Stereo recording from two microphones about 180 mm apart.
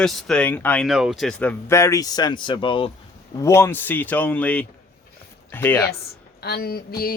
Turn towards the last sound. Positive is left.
turn(degrees=55)  # may be behind; listen again after turning